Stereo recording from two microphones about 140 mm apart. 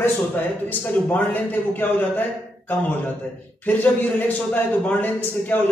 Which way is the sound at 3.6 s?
10° left (ahead or behind).